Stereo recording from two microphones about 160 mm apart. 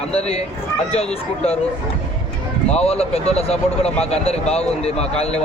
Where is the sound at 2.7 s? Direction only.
40° left (ahead or behind).